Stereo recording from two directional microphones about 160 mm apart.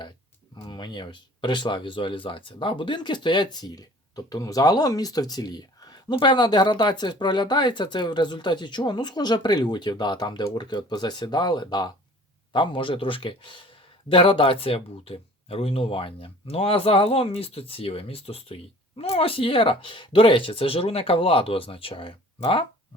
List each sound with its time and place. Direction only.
0.7 s speech: 25° left (ahead or behind)